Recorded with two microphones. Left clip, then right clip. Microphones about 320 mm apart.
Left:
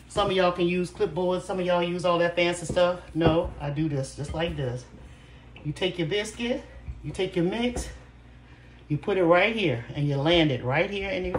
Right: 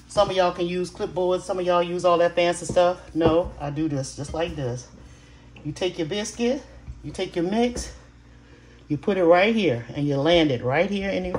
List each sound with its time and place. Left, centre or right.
0.3 s speech: right
5.7 s speech: right
8.8 s speech: right